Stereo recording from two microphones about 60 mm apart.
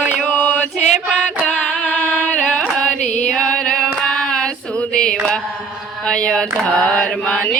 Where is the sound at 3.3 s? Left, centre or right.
Centre.